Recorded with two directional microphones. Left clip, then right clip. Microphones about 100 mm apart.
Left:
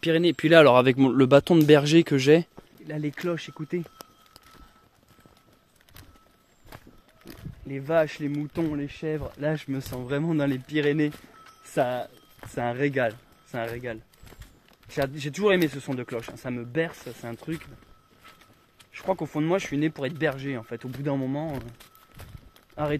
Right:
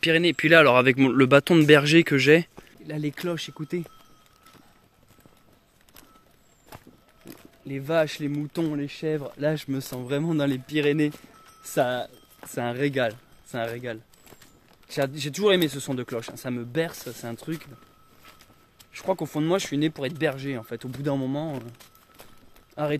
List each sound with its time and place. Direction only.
0.0 s speech: 25° left (ahead or behind)
2.9 s speech: 15° right (ahead or behind)
7.2 s speech: 15° right (ahead or behind); by 9.2 s 30° right (ahead or behind)
9.2 s speech: 20° right (ahead or behind)
11.6 s speech: 30° right (ahead or behind)
12.4 s speech: 20° right (ahead or behind)
13.9 s speech: 30° right (ahead or behind)
14.9 s speech: 20° right (ahead or behind)
18.9 s speech: 30° right (ahead or behind)
19.9 s speech: 20° right (ahead or behind); by 21.5 s 35° right (ahead or behind)
22.8 s speech: 35° right (ahead or behind)